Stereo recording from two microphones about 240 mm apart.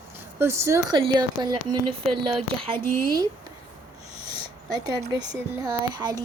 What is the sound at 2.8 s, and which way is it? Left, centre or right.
Speech, right.